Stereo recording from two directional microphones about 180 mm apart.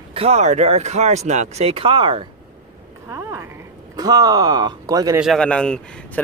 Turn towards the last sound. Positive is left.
turn(degrees=5)  # may be behind; listen again after turning